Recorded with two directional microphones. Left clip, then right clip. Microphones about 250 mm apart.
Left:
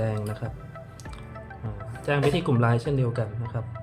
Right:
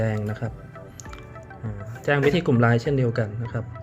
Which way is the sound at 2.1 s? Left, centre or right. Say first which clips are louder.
Right 4 dB; centre.